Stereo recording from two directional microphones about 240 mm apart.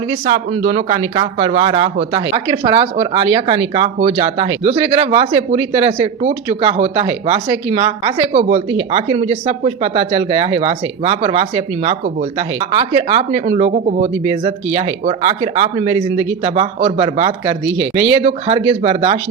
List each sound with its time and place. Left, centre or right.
0.3 s speech: right